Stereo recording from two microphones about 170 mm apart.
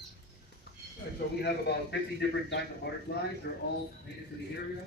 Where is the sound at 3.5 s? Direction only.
70° left (ahead or behind).